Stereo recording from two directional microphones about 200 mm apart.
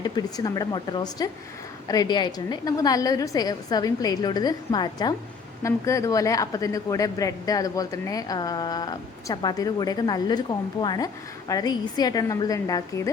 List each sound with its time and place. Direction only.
0.0 s a woman's voice: 20° left (ahead or behind)